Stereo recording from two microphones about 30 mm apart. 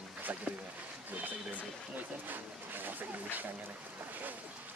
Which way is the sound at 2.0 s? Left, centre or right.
Right.